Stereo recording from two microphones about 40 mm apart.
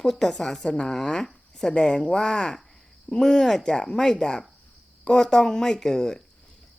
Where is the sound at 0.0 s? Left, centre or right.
Centre.